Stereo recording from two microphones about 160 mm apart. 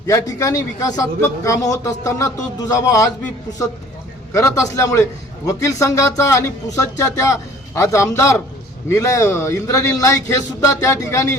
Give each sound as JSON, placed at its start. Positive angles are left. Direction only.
{"t": 0.1, "sound": "a man's voice", "side_deg": 20}
{"t": 4.3, "sound": "a man's voice", "side_deg": 20}